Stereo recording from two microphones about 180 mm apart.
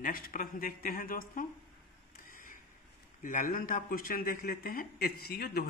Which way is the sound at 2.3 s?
50° left (ahead or behind).